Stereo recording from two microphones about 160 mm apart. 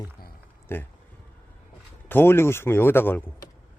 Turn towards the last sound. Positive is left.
turn(degrees=15)  # may be behind; listen again after turning